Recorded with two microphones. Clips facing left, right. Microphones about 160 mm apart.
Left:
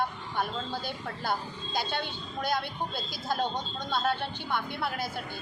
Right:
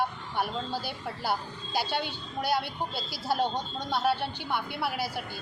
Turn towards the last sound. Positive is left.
turn(degrees=-5)  # may be behind; listen again after turning